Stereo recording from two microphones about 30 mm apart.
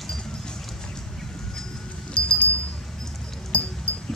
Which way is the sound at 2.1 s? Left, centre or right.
Left.